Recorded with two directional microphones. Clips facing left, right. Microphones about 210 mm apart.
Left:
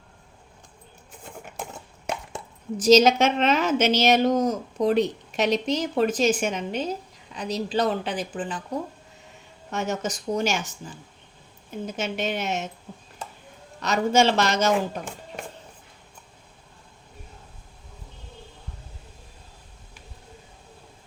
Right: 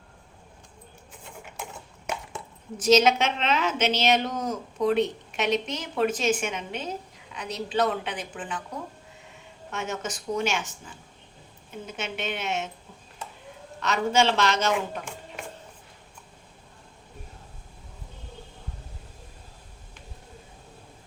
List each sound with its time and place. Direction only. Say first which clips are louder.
2.7 s a woman's voice: left 4 dB; 35° left (ahead or behind)
9.7 s a woman's voice: left 4 dB; 40° left (ahead or behind)
13.8 s speech: left 3 dB; 40° left (ahead or behind)